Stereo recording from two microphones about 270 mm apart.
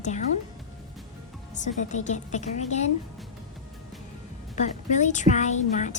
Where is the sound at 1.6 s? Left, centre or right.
Left.